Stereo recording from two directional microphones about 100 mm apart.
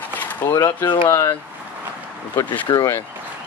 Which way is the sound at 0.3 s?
20° left (ahead or behind).